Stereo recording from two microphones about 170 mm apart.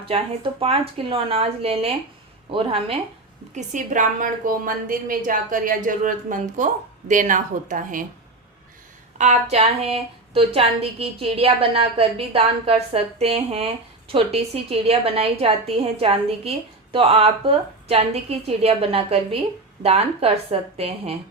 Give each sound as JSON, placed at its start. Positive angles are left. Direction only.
{"t": 0.0, "sound": "a woman's voice", "side_deg": -35}
{"t": 3.5, "sound": "a woman's voice", "side_deg": -45}
{"t": 9.1, "sound": "a woman's voice", "side_deg": -40}